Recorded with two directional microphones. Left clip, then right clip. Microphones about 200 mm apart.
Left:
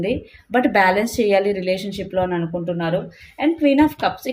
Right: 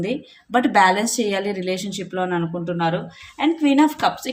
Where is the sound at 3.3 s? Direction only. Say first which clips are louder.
Left 1 dB; 20° right (ahead or behind).